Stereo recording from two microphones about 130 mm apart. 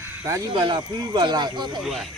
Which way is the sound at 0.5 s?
40° right (ahead or behind).